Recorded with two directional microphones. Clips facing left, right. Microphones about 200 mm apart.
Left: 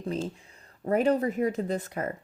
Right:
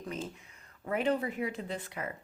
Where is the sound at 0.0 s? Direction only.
30° left (ahead or behind).